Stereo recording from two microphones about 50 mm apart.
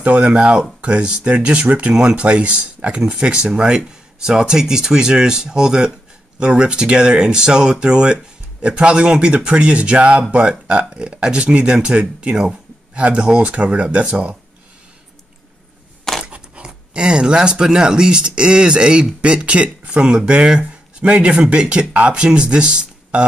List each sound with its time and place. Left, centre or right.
0.0 s speech: right
16.3 s speech: right